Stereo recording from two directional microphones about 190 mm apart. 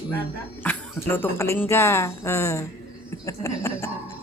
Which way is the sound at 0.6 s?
10° left (ahead or behind).